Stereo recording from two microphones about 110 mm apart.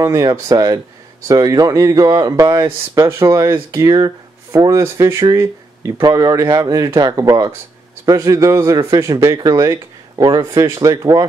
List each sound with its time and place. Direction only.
0.0 s speech: 35° right (ahead or behind)